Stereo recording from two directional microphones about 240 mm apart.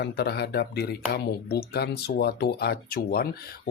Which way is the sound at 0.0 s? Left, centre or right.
Left.